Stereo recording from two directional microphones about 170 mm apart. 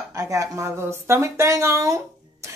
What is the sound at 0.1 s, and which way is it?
Speech, 20° right (ahead or behind).